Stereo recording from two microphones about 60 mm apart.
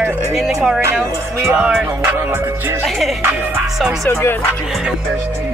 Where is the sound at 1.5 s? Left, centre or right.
Centre.